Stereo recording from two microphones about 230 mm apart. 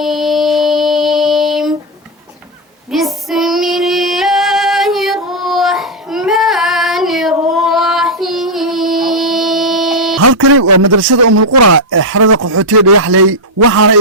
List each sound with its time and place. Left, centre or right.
0.0 s music: centre
2.9 s female singing: centre
10.2 s a man's voice: right